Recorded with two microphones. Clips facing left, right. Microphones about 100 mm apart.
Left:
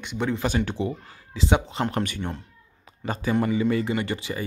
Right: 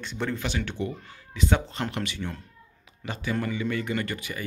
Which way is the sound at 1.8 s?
45° left (ahead or behind).